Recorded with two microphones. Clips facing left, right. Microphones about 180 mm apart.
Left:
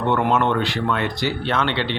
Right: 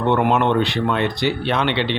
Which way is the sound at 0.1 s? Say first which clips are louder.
Right 2 dB; 15° right (ahead or behind).